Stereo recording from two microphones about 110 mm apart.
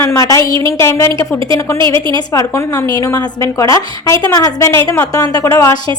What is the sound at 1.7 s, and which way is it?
Speech, 45° right (ahead or behind).